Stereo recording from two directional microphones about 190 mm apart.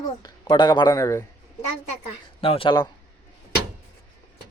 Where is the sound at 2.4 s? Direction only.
30° left (ahead or behind).